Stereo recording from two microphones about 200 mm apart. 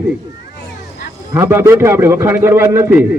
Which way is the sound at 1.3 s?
15° right (ahead or behind).